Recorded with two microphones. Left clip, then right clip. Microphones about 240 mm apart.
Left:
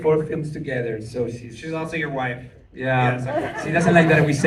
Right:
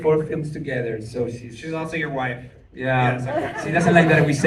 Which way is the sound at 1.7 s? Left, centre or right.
Left.